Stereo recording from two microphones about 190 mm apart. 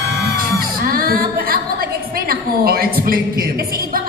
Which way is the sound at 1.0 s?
50° right (ahead or behind).